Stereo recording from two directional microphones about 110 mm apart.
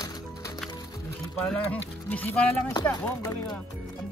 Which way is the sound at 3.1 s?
25° left (ahead or behind).